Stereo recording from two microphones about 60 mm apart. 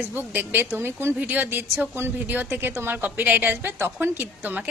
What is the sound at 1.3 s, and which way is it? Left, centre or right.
A woman's voice, right.